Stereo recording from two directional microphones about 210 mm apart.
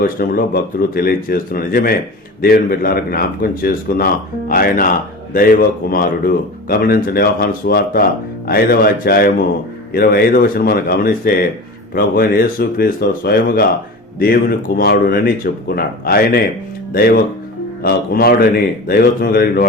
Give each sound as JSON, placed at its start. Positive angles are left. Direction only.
{"t": 0.0, "sound": "speech", "side_deg": 45}